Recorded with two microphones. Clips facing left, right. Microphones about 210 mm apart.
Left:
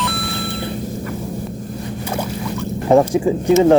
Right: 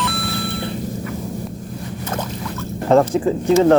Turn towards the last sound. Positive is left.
turn(degrees=15)  # may be behind; listen again after turning